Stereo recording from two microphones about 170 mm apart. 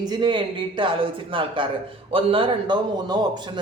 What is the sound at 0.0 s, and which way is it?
A man's voice, 25° right (ahead or behind).